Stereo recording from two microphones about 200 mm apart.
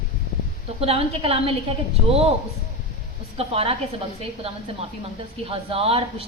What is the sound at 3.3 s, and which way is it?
Speech, 30° right (ahead or behind).